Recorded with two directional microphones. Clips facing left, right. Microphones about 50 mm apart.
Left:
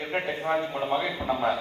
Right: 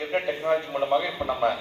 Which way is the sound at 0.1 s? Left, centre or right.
Centre.